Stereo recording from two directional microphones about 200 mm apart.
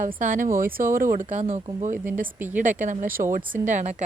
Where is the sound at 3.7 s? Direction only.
35° right (ahead or behind).